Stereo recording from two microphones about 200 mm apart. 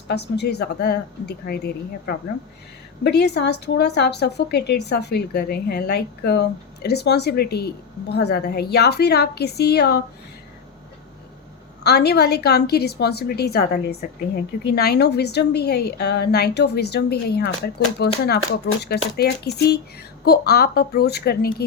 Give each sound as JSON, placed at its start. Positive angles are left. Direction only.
{"t": 0.1, "sound": "a woman's voice", "side_deg": 55}
{"t": 11.8, "sound": "a woman's voice", "side_deg": 55}